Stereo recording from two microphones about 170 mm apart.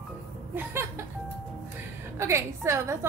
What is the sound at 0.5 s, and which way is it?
A woman's voice, 15° right (ahead or behind).